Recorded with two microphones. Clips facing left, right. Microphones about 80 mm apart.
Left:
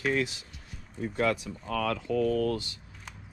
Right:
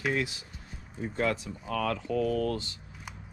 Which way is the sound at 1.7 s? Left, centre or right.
Right.